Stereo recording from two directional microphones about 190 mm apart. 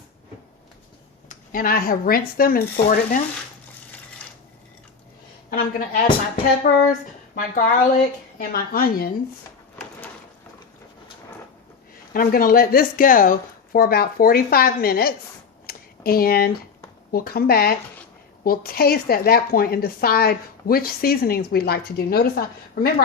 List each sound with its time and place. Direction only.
1.3 s speech: 50° left (ahead or behind)
5.5 s speech: 45° left (ahead or behind)
12.1 s speech: 50° left (ahead or behind)
15.6 s a sound: 55° left (ahead or behind)
17.1 s speech: 50° left (ahead or behind)